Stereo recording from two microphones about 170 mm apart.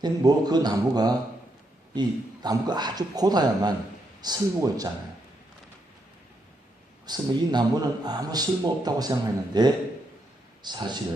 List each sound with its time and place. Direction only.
0.0 s a man's voice: 25° right (ahead or behind)
7.0 s a man's voice: 25° right (ahead or behind)